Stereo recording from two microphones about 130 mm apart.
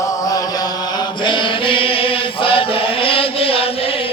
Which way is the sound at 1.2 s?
40° left (ahead or behind).